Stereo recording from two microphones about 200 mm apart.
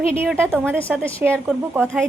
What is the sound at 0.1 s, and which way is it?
A woman's voice, 5° left (ahead or behind).